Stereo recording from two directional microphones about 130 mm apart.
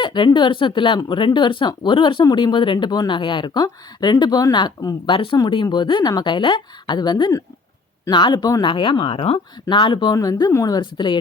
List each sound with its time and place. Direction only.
0.0 s speech: 35° left (ahead or behind)